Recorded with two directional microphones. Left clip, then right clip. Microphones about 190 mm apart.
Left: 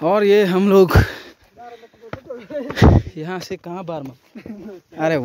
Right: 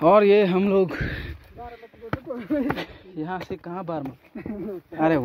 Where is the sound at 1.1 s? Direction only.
35° left (ahead or behind).